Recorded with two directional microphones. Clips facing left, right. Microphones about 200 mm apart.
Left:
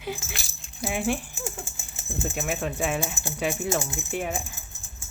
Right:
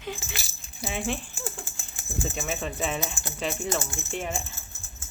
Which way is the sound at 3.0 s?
25° left (ahead or behind).